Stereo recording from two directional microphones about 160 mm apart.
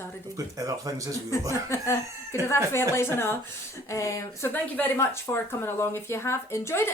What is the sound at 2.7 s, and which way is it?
Speech, 15° left (ahead or behind).